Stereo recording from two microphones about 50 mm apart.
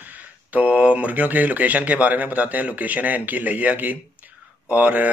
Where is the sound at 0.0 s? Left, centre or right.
Right.